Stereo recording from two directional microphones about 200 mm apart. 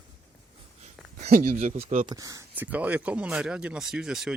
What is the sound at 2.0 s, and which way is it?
Speech, 20° right (ahead or behind).